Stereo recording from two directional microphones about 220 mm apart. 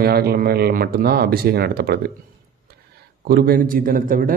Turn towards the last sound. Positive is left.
turn(degrees=-40)  # may be behind; listen again after turning